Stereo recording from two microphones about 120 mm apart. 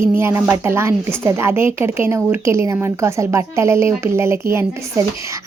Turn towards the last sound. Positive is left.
turn(degrees=-20)  # may be behind; listen again after turning